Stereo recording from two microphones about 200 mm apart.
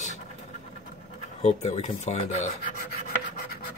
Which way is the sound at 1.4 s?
35° left (ahead or behind).